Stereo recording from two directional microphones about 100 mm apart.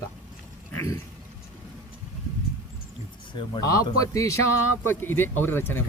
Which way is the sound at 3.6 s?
35° left (ahead or behind).